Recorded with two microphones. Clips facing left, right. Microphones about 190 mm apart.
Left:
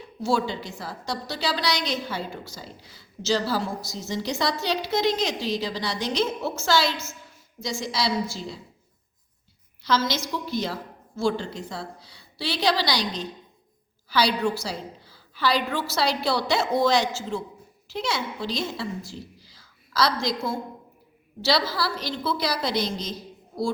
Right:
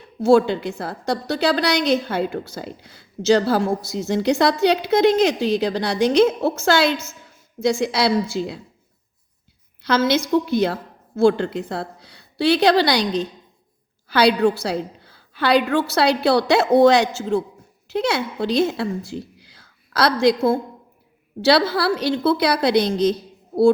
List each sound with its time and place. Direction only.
0.2 s a woman's voice: 55° right (ahead or behind)
9.8 s a woman's voice: 60° right (ahead or behind)